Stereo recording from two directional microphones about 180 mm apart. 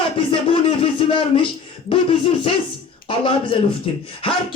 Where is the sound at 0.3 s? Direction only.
30° left (ahead or behind).